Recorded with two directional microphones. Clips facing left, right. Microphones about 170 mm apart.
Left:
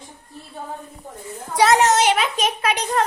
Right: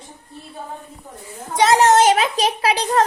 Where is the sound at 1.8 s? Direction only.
45° right (ahead or behind).